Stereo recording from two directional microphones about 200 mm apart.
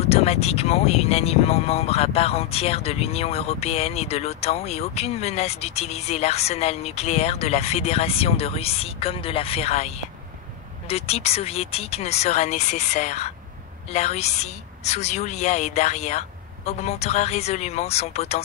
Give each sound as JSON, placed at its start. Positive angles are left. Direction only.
{"t": 0.0, "sound": "speech", "side_deg": 30}